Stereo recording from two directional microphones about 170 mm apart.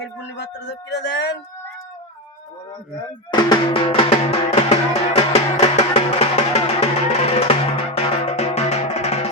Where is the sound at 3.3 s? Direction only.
30° left (ahead or behind).